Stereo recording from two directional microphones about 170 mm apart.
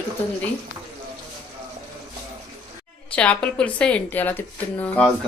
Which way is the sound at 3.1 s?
5° left (ahead or behind).